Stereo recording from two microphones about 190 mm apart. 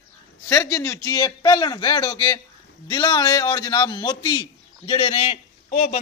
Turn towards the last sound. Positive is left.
turn(degrees=45)  # may be behind; listen again after turning